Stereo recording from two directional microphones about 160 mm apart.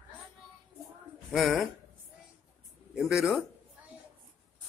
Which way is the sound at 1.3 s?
Centre (ahead or behind).